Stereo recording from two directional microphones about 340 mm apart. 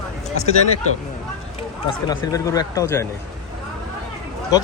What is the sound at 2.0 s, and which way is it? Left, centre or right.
Speech, centre.